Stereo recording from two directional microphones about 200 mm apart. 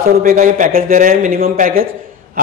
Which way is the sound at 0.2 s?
45° right (ahead or behind).